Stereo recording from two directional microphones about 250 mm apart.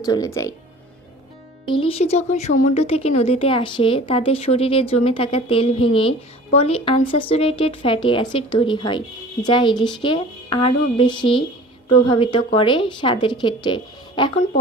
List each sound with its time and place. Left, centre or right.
0.0 s speech: centre
1.6 s speech: left